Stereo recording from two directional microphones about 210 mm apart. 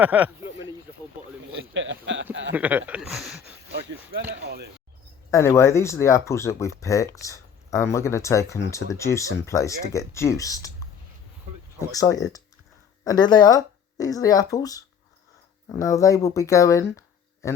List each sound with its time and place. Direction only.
0.0 s speech: 5° right (ahead or behind)
1.7 s a sound: 60° right (ahead or behind)
2.5 s speech: 10° right (ahead or behind)
3.7 s a sound: 55° right (ahead or behind)
5.3 s speech: 15° left (ahead or behind)
11.8 s speech: 15° left (ahead or behind)